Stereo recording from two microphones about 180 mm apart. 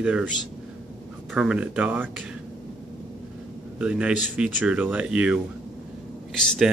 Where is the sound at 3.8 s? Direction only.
5° right (ahead or behind).